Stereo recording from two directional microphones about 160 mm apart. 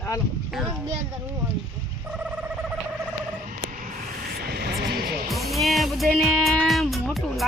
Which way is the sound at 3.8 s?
65° right (ahead or behind).